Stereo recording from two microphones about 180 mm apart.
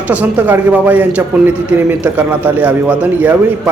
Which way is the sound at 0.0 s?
10° right (ahead or behind).